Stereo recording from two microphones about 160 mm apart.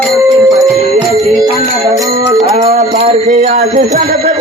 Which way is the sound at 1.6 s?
40° right (ahead or behind).